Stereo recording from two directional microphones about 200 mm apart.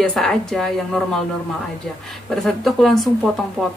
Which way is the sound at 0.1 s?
Centre (ahead or behind).